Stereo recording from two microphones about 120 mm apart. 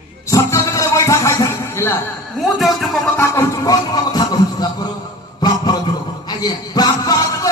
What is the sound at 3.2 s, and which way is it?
Music, 25° left (ahead or behind).